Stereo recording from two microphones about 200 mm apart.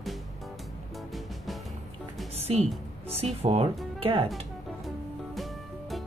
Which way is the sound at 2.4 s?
30° right (ahead or behind).